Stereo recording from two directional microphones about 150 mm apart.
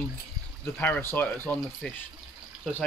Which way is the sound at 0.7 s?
10° left (ahead or behind).